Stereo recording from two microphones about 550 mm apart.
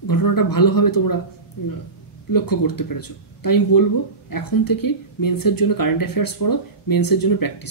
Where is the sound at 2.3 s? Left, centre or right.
Left.